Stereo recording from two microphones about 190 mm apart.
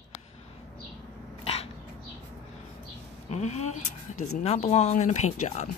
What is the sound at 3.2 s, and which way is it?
Speech, 35° left (ahead or behind).